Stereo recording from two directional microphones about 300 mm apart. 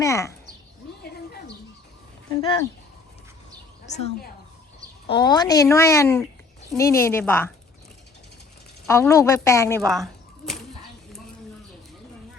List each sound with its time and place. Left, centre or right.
0.0 s a woman's voice: centre
3.8 s a woman's voice: left
8.9 s speech: centre